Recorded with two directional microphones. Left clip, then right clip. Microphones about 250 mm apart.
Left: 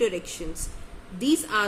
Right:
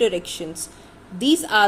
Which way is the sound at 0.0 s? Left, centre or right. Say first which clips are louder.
Right 5 dB; centre.